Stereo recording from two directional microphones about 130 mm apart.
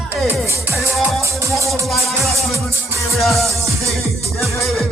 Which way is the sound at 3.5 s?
25° right (ahead or behind).